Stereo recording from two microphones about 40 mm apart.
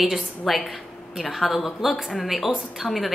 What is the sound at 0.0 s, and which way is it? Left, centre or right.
A woman's voice, centre.